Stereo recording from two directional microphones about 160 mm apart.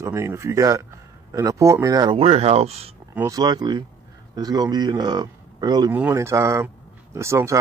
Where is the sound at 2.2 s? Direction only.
40° right (ahead or behind).